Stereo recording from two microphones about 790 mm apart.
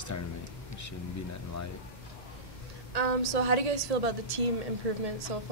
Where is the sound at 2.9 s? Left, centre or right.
Right.